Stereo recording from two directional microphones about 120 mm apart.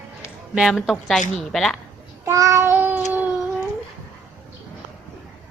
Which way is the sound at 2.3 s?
25° right (ahead or behind).